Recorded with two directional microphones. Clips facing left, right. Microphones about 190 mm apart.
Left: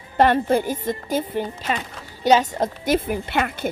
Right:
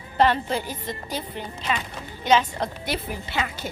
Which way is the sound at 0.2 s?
50° left (ahead or behind).